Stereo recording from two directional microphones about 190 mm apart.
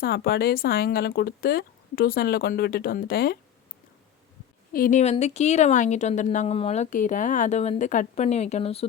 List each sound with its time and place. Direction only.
0.0 s speech: 55° left (ahead or behind)
4.7 s a woman's voice: 45° left (ahead or behind)